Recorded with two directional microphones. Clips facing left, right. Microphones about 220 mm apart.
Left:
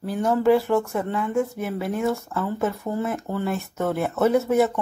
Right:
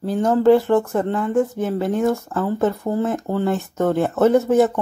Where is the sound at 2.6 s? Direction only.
40° right (ahead or behind).